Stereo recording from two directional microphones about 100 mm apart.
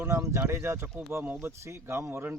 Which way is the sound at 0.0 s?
30° right (ahead or behind).